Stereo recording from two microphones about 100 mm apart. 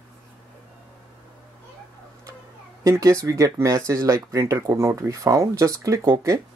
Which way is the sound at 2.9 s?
35° right (ahead or behind).